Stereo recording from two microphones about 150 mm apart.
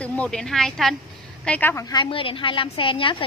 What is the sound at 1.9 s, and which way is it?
A woman's voice, 35° left (ahead or behind).